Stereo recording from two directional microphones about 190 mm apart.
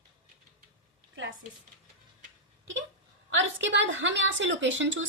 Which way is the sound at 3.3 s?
75° right (ahead or behind).